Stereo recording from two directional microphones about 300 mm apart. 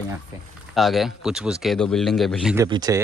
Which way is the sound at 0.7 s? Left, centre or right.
Centre.